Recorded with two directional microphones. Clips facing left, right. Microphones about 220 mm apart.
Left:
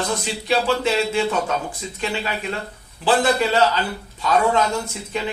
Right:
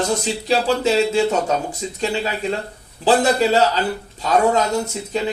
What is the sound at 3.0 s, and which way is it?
Speech, 40° right (ahead or behind).